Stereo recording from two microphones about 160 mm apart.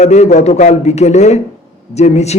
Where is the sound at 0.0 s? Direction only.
45° left (ahead or behind).